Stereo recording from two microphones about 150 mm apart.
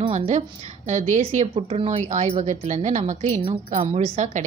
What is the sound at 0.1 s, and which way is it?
A woman's voice, 45° right (ahead or behind).